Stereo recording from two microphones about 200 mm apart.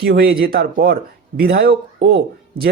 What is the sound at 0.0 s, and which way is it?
Speech, 50° right (ahead or behind).